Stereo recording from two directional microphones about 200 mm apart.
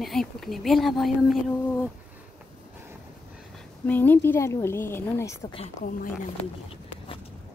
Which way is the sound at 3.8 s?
10° left (ahead or behind).